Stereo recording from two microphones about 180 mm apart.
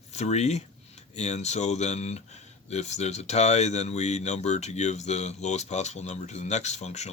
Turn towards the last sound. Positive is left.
turn(degrees=40)  # may be behind; listen again after turning